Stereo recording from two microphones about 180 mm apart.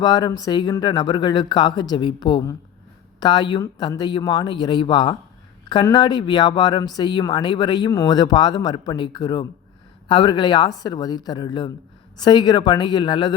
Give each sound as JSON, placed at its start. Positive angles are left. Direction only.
{"t": 0.0, "sound": "speech", "side_deg": 20}